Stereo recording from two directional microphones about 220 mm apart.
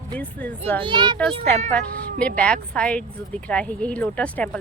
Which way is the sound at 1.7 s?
5° left (ahead or behind).